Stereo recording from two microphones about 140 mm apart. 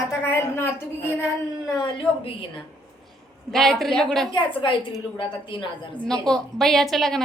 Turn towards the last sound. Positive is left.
turn(degrees=0)  # may be behind; listen again after turning